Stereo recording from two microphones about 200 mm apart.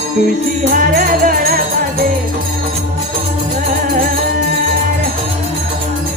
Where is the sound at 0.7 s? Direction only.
45° right (ahead or behind).